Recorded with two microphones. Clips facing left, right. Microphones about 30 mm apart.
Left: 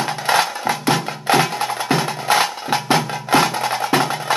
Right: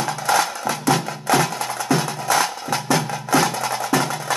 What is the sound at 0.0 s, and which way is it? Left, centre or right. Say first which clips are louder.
Music: left 2 dB; left.